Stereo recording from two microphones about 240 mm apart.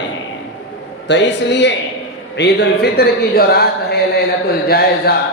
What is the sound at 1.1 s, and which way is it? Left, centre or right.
Speech, left.